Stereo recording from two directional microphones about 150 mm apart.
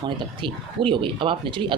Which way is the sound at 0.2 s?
35° right (ahead or behind).